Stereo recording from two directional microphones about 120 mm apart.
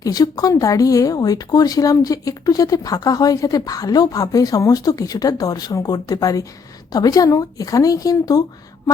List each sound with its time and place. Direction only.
0.0 s speech: 30° left (ahead or behind)